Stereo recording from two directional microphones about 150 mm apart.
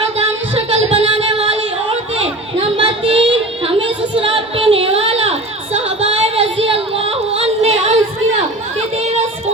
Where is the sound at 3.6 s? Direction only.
35° right (ahead or behind).